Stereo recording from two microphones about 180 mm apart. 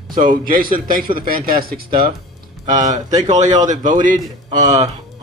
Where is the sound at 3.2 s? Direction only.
40° right (ahead or behind).